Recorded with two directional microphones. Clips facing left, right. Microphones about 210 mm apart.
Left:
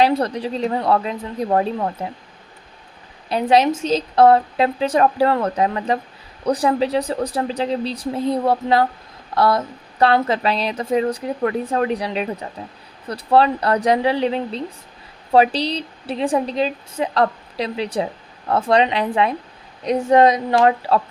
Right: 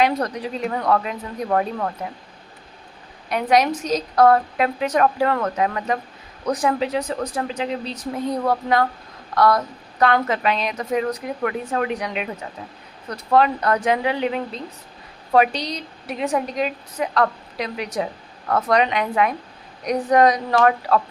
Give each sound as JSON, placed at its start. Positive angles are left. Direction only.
{"t": 0.0, "sound": "a woman's voice", "side_deg": 30}
{"t": 3.2, "sound": "a woman's voice", "side_deg": 30}